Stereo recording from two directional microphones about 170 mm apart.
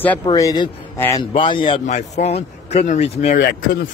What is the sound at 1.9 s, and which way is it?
Speech, 40° left (ahead or behind).